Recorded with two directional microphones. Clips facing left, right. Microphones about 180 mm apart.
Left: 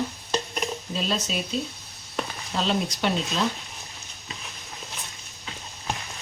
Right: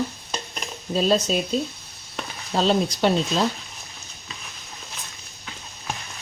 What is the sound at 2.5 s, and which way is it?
Speech, 35° right (ahead or behind).